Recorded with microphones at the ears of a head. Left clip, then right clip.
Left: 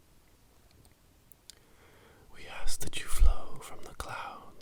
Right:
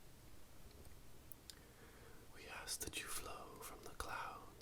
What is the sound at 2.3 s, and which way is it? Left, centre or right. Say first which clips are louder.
Whispering: left 7 dB; left.